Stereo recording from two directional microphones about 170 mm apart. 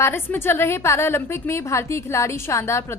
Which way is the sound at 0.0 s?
15° left (ahead or behind).